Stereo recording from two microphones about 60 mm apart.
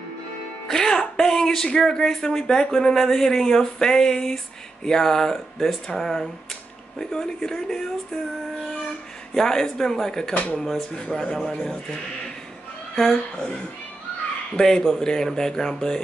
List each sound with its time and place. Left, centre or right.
0.7 s speech: centre
9.3 s speech: centre
10.3 s speech: left
10.6 s speech: centre
14.5 s speech: centre